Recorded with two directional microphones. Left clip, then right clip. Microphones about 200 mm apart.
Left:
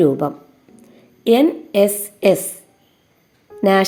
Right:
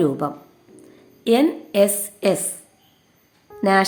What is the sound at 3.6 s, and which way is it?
Speech, 15° left (ahead or behind).